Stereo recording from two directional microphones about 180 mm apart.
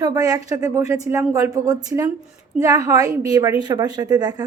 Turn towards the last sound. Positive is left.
turn(degrees=-20)  # may be behind; listen again after turning